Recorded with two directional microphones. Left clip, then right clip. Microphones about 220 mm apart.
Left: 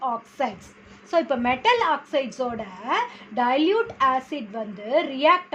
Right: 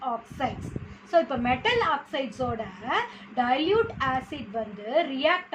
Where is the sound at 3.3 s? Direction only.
45° left (ahead or behind).